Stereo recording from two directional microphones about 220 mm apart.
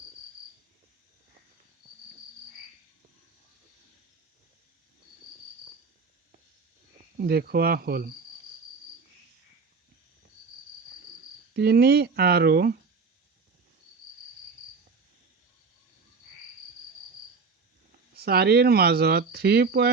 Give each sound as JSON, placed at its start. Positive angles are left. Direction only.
{"t": 7.2, "sound": "speech", "side_deg": -45}
{"t": 11.5, "sound": "speech", "side_deg": -45}
{"t": 18.1, "sound": "speech", "side_deg": -45}